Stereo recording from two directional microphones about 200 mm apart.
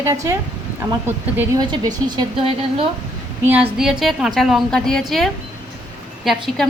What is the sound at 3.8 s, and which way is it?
A woman's voice, centre (ahead or behind).